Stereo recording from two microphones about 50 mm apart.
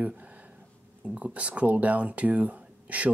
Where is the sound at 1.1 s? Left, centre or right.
Right.